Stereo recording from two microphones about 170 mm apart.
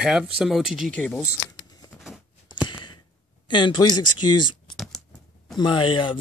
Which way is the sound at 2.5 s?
25° left (ahead or behind).